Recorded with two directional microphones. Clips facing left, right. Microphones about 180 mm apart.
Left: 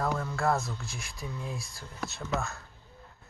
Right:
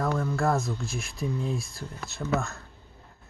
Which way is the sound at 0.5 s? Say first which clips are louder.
Right 3 dB; 10° right (ahead or behind).